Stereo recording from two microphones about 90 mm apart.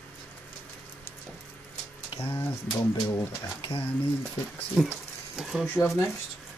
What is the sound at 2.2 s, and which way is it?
Speech, 20° left (ahead or behind).